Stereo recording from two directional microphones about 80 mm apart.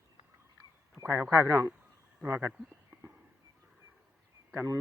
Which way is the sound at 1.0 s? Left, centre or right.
Right.